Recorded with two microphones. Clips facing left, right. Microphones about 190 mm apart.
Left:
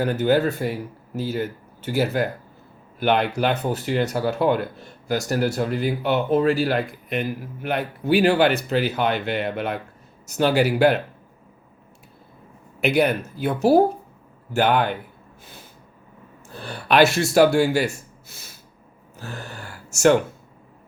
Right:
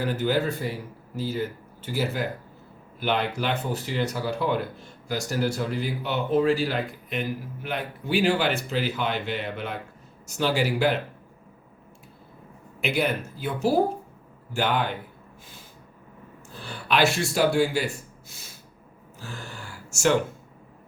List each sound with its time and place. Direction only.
0.0 s speech: 40° left (ahead or behind)
1.8 s speech: 70° left (ahead or behind)
12.8 s speech: 65° left (ahead or behind)
16.6 s speech: 70° left (ahead or behind)
19.9 s speech: 65° left (ahead or behind)